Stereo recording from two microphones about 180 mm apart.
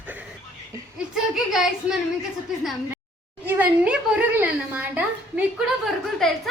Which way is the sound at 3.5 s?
10° right (ahead or behind).